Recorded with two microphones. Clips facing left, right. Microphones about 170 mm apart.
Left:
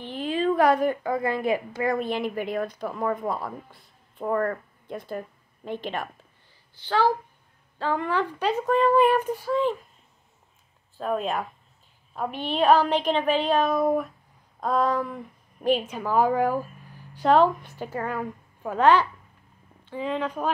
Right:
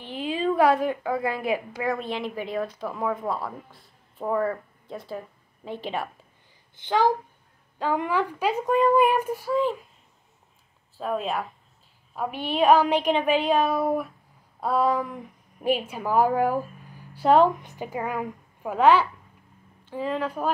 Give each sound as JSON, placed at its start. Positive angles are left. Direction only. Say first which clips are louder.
{"t": 0.1, "sound": "a woman's voice", "louder": "left 1 dB", "side_deg": -10}
{"t": 11.0, "sound": "a woman's voice", "louder": "left 1 dB", "side_deg": 0}